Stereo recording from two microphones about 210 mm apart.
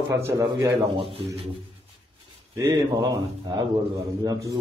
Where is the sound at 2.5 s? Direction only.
20° right (ahead or behind).